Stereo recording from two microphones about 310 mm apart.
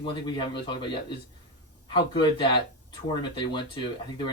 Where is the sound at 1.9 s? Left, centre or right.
Centre.